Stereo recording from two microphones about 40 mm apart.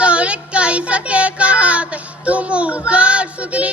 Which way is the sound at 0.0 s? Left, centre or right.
Right.